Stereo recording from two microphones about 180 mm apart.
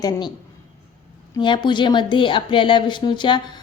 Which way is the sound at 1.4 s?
25° left (ahead or behind).